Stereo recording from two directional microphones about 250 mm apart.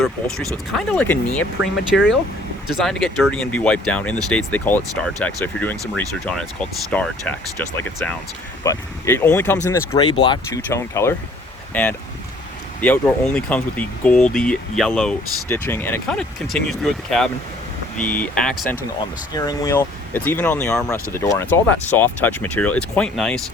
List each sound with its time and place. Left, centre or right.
0.0 s speech: centre
1.9 s speech: left
2.6 s speech: centre